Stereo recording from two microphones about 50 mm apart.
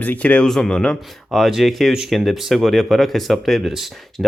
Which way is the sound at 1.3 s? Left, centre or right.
Centre.